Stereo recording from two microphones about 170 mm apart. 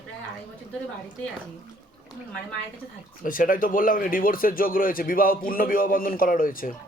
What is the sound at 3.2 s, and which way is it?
A man's voice, 55° left (ahead or behind).